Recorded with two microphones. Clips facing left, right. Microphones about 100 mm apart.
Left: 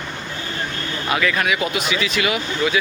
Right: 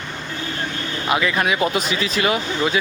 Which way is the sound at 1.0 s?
20° right (ahead or behind).